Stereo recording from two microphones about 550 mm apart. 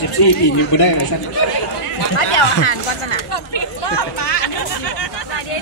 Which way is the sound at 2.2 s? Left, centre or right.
Left.